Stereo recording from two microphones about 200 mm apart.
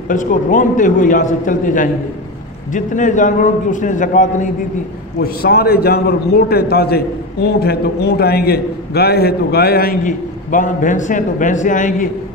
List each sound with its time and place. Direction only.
0.1 s a man's voice: 40° left (ahead or behind)
5.2 s a man's voice: 50° left (ahead or behind)